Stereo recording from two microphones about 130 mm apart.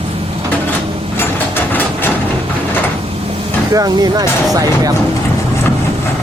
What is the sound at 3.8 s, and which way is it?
Speech, 30° right (ahead or behind).